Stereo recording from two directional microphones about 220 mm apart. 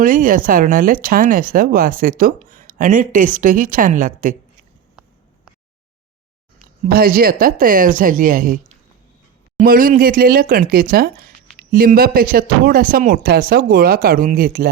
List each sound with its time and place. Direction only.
0.0 s speech: 40° right (ahead or behind)
6.8 s speech: 40° right (ahead or behind)